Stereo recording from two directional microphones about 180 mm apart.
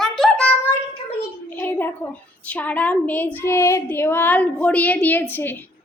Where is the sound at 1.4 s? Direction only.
10° left (ahead or behind).